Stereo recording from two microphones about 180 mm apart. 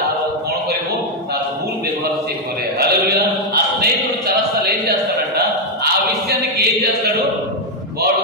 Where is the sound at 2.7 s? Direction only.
65° right (ahead or behind).